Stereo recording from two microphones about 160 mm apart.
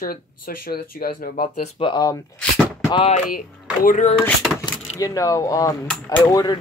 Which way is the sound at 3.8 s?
55° left (ahead or behind).